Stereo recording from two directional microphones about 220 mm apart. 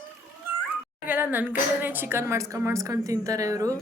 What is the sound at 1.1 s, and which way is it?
A woman's voice, 10° right (ahead or behind).